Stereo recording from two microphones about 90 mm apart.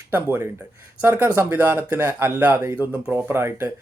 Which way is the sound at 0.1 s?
25° right (ahead or behind).